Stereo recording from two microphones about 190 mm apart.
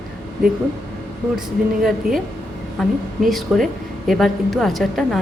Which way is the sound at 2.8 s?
Centre (ahead or behind).